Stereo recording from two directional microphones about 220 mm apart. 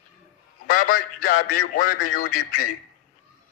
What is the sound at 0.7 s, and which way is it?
Speech, 40° left (ahead or behind).